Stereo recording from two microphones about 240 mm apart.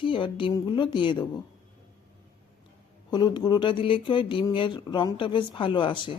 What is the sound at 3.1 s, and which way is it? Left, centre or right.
Speech, centre.